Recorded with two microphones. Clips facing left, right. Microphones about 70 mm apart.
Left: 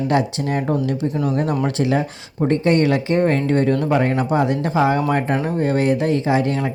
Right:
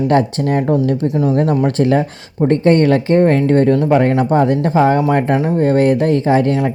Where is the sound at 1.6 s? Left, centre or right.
Right.